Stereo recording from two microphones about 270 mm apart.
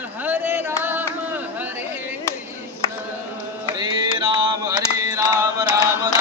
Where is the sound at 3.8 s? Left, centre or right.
Centre.